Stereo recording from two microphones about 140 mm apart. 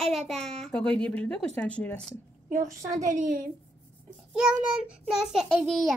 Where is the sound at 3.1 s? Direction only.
70° right (ahead or behind).